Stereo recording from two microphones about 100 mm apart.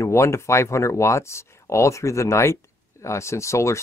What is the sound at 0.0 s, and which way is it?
Speech, 30° left (ahead or behind).